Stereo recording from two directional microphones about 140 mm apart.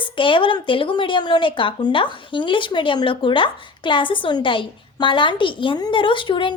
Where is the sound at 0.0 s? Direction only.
35° left (ahead or behind).